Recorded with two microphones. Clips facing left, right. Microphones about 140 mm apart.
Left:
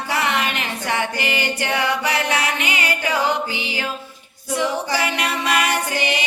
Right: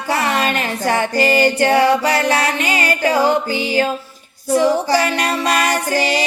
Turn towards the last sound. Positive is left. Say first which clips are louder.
# right 5 dB
turn(degrees=-35)  # may be behind; listen again after turning